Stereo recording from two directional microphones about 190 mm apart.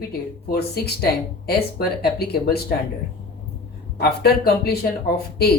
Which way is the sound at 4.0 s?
55° left (ahead or behind).